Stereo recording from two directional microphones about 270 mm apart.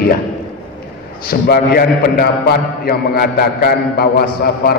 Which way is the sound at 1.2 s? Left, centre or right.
Left.